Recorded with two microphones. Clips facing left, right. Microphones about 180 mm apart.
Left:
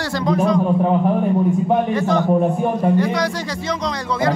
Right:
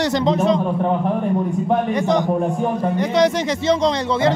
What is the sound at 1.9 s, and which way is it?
A man's voice, 20° right (ahead or behind).